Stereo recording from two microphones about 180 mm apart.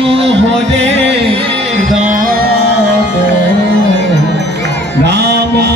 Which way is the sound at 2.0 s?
50° right (ahead or behind).